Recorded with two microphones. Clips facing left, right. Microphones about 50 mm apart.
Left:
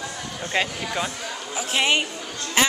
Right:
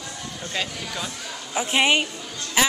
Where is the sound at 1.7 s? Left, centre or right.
Centre.